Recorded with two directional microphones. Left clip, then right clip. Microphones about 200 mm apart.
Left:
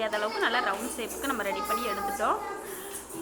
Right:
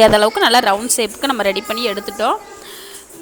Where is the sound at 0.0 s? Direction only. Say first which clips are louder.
Right 17 dB; 65° right (ahead or behind).